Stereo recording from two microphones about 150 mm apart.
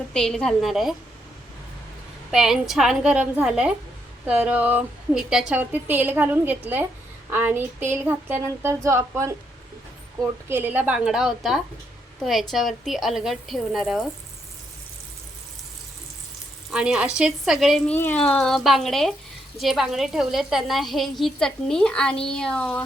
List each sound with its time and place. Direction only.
0.1 s a woman's voice: 5° left (ahead or behind)
2.3 s a woman's voice: 5° right (ahead or behind); by 9.3 s 20° right (ahead or behind)
10.5 s a woman's voice: 15° right (ahead or behind)
16.7 s a woman's voice: 5° right (ahead or behind)
17.9 s a woman's voice: 10° left (ahead or behind)